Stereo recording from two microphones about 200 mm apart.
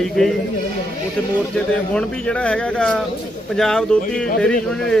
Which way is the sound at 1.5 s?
5° left (ahead or behind).